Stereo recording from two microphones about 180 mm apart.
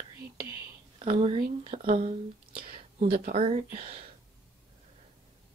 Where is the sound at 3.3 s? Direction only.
35° right (ahead or behind).